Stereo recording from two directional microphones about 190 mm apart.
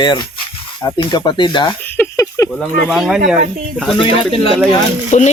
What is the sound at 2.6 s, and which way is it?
Speech, centre (ahead or behind).